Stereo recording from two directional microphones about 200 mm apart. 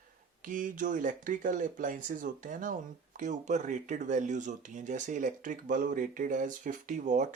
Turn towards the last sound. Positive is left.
turn(degrees=-40)  # may be behind; listen again after turning